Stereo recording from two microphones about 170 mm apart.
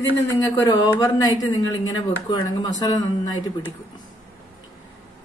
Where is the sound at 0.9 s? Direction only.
20° left (ahead or behind).